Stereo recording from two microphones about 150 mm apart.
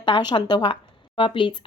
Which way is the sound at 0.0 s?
30° left (ahead or behind).